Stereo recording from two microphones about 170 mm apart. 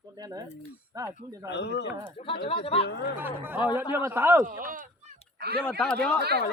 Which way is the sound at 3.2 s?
10° right (ahead or behind).